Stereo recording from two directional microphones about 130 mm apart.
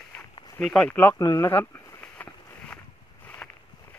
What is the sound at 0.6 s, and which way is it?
Speech, 5° left (ahead or behind).